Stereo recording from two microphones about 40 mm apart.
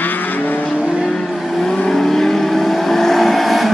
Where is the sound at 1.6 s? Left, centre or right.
Centre.